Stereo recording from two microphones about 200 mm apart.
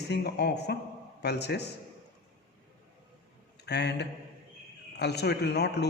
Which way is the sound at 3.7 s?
55° left (ahead or behind).